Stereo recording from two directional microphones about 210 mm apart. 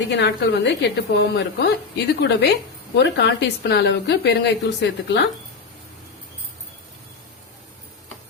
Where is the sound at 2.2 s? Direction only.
50° left (ahead or behind).